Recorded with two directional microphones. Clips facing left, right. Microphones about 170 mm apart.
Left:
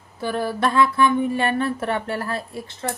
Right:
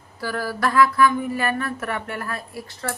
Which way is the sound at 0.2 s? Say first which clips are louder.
Left 2 dB; 25° left (ahead or behind).